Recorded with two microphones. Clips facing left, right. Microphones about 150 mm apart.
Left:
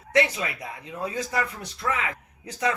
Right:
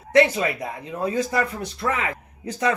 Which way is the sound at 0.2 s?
50° right (ahead or behind).